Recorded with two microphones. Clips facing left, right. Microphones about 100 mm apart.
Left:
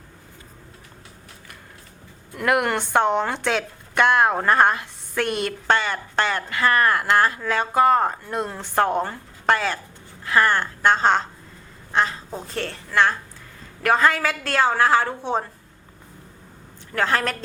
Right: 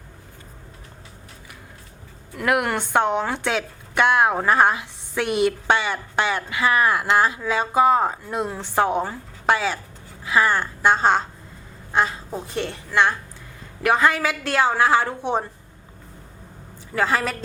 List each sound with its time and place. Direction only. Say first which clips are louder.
2.3 s a woman's voice: left 1 dB; centre (ahead or behind)
16.9 s a woman's voice: even; 5° right (ahead or behind)